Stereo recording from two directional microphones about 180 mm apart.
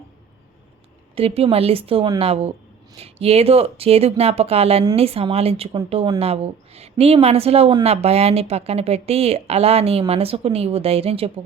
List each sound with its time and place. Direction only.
1.1 s speech: 35° right (ahead or behind)